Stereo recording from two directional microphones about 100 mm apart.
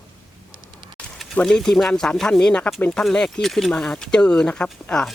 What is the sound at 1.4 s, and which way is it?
Speech, 5° left (ahead or behind).